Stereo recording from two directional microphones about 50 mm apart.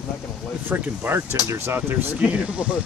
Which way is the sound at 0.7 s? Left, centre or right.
Right.